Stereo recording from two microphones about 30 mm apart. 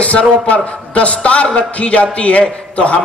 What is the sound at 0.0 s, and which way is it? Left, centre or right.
A man's voice, left.